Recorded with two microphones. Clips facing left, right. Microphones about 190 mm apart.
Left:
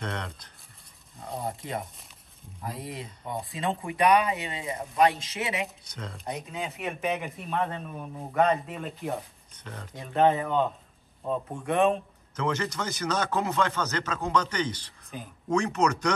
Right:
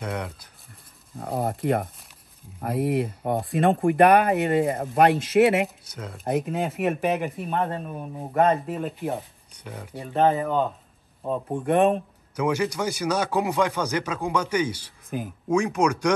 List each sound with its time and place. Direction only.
0.0 s speech: 10° right (ahead or behind)
1.1 s speech: 60° right (ahead or behind)
5.9 s speech: 5° right (ahead or behind)
6.2 s speech: 55° right (ahead or behind)
7.0 s speech: centre (ahead or behind)
7.4 s speech: 35° right (ahead or behind)
8.1 s speech: 25° right (ahead or behind)
8.6 s speech: centre (ahead or behind)
12.4 s speech: 10° right (ahead or behind)